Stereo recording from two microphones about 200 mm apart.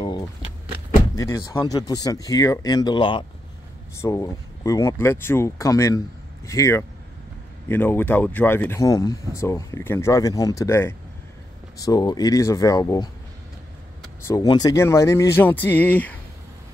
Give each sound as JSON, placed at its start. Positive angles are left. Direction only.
{"t": 1.1, "sound": "speech", "side_deg": 15}
{"t": 14.2, "sound": "speech", "side_deg": 20}